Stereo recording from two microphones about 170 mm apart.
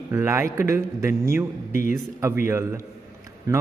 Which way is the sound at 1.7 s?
50° left (ahead or behind).